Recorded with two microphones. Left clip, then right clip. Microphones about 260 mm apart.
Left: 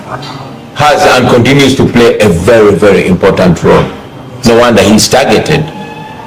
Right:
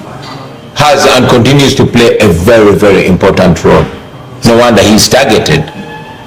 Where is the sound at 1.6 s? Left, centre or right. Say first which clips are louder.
Even; right.